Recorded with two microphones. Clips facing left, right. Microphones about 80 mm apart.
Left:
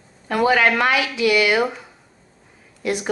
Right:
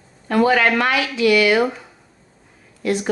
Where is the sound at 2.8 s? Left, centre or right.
Centre.